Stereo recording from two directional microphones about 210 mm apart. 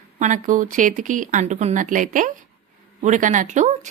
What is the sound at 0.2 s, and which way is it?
Speech, 35° right (ahead or behind).